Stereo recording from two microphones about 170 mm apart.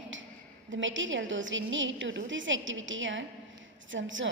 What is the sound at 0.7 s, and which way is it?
A woman's voice, 90° right.